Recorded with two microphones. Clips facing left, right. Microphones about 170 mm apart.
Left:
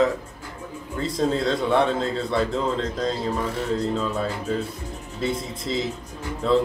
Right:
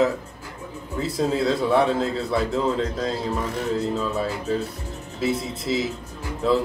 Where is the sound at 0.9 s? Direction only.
5° right (ahead or behind).